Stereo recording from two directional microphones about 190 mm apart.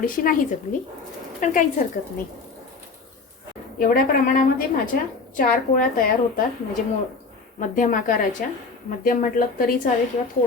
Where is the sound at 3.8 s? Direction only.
50° left (ahead or behind).